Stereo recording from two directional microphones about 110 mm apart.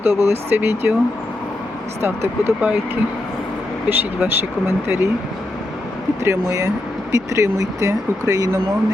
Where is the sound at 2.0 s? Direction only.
25° right (ahead or behind).